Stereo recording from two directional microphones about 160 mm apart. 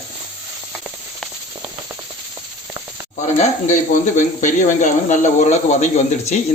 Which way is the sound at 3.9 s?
50° left (ahead or behind).